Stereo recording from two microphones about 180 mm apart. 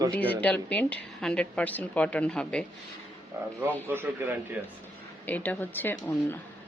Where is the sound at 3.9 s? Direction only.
10° right (ahead or behind).